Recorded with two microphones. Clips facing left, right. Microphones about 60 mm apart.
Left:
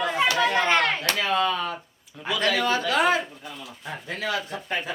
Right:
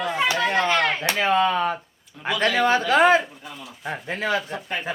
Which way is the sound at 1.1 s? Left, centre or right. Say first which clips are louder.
Right 4 dB; right.